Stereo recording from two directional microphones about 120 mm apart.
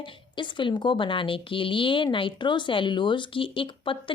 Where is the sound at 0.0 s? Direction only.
40° left (ahead or behind).